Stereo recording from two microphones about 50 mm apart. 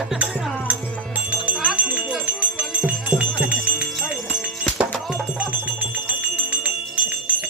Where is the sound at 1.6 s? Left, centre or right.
Right.